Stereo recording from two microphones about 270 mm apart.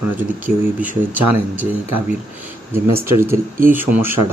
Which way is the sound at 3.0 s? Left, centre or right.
Centre.